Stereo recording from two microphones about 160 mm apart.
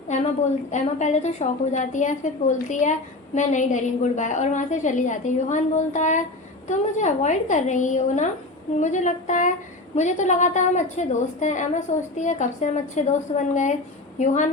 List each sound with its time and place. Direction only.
0.7 s a woman's voice: 50° left (ahead or behind)